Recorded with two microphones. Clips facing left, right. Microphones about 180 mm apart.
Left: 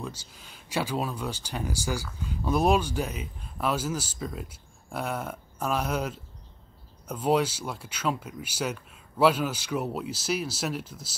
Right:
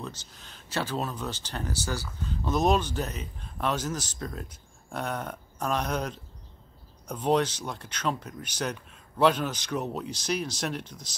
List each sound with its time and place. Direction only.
0.0 s speech: 10° left (ahead or behind)